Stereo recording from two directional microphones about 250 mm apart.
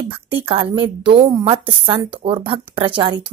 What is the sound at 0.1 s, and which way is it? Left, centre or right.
A woman's voice, right.